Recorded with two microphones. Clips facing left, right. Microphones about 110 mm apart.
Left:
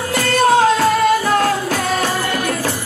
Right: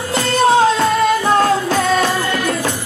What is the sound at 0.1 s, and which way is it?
Music, 25° right (ahead or behind).